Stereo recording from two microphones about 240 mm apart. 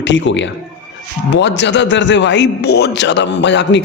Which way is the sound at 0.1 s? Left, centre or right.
Left.